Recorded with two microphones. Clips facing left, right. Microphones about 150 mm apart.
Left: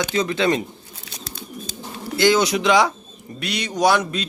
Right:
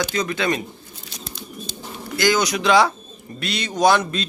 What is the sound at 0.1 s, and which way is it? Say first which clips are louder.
Speech: left 3 dB; 25° left (ahead or behind).